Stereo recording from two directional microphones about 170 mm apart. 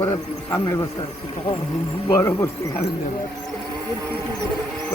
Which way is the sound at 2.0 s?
15° left (ahead or behind).